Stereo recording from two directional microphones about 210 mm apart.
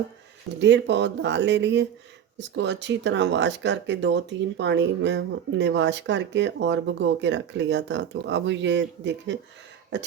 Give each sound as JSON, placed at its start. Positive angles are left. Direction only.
{"t": 0.6, "sound": "speech", "side_deg": -55}